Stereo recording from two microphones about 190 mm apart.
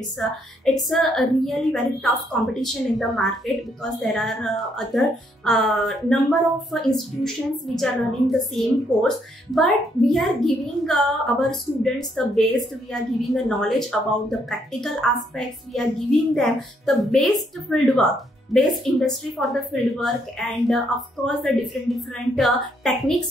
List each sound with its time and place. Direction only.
0.2 s speech: centre (ahead or behind)